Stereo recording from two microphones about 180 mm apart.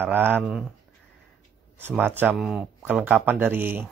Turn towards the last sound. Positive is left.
turn(degrees=-10)  # may be behind; listen again after turning